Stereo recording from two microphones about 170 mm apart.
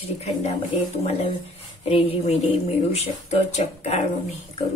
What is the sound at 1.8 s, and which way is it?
Speech, 35° left (ahead or behind).